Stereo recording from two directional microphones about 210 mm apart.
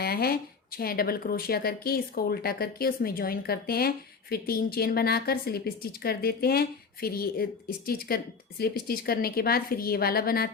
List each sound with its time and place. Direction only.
0.0 s speech: 45° left (ahead or behind)